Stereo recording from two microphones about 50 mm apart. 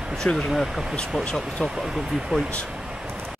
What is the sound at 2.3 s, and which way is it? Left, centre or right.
Speech, centre.